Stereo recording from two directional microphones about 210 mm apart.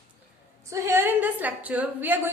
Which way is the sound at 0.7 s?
10° right (ahead or behind).